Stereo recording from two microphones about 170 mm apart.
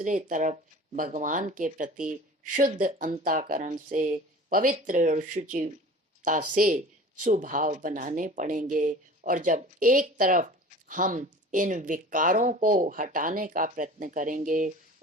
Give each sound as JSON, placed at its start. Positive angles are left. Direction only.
{"t": 0.0, "sound": "speech", "side_deg": -50}